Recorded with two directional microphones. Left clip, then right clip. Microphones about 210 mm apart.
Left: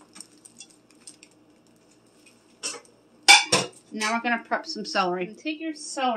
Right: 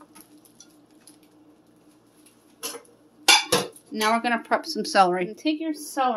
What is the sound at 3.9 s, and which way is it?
A woman's voice, 50° right (ahead or behind).